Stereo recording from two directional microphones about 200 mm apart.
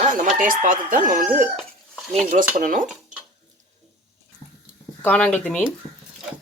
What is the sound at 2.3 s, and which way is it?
Speech, 40° right (ahead or behind).